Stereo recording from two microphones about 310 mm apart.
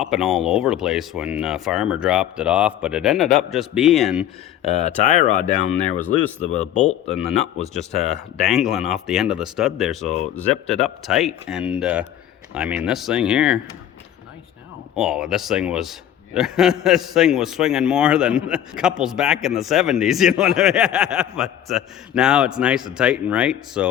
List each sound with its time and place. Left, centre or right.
0.0 s a man's voice: centre
4.6 s speech: left
6.5 s speech: left
7.7 s a man's voice: centre
14.9 s a man's voice: centre